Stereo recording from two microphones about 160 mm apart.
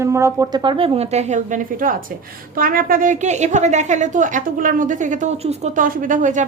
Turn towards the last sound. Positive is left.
turn(degrees=-50)  # may be behind; listen again after turning